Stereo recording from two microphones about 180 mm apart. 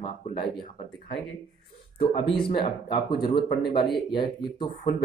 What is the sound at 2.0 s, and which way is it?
Speech, 30° left (ahead or behind).